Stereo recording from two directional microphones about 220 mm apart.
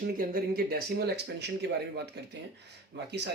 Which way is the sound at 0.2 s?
40° right (ahead or behind).